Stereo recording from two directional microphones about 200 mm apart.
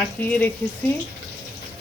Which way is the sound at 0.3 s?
5° left (ahead or behind).